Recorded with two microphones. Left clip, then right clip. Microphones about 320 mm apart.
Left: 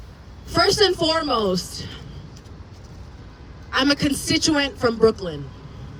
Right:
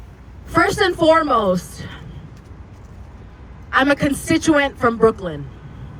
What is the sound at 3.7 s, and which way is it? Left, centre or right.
A woman's voice, centre.